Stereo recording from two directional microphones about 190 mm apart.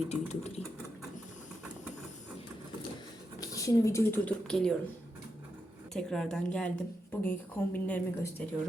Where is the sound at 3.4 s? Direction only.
15° left (ahead or behind).